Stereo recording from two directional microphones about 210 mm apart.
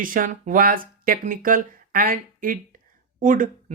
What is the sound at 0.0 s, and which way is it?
Speech, 40° right (ahead or behind).